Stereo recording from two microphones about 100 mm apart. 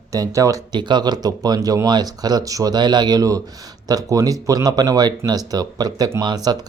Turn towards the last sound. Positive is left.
turn(degrees=-45)  # may be behind; listen again after turning